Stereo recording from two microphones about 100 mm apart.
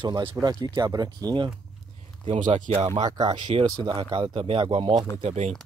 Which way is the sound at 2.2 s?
80° right.